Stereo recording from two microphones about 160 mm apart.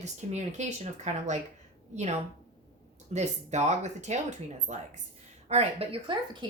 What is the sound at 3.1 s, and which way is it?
A woman's voice, 45° right (ahead or behind).